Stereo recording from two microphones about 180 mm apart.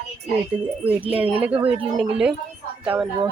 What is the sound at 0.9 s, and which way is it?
Speech, 10° right (ahead or behind).